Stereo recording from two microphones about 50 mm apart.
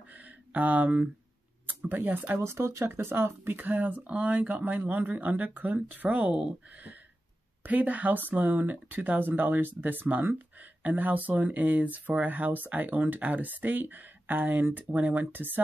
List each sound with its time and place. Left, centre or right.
0.1 s a sound: right
1.9 s speech: right
2.3 s speech: right
2.8 s speech: right
7.6 s speech: right